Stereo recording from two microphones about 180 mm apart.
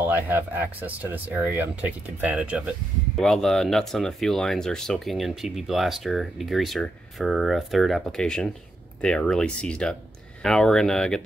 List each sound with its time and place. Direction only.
0.0 s speech: 10° right (ahead or behind)